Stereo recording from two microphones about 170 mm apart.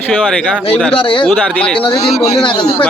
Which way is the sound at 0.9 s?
30° left (ahead or behind).